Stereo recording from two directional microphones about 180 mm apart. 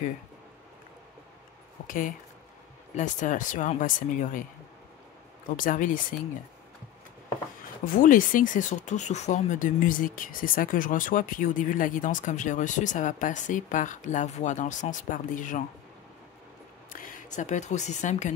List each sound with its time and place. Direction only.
1.9 s speech: 50° left (ahead or behind)
5.6 s speech: 50° left (ahead or behind)
7.8 s speech: 50° left (ahead or behind)
16.9 s speech: 45° left (ahead or behind)